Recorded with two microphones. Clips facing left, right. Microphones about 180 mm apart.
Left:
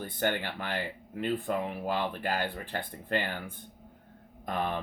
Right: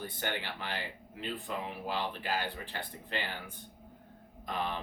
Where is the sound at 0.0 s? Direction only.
50° left (ahead or behind).